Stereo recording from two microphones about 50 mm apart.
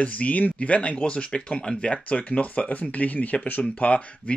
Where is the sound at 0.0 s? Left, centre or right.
Left.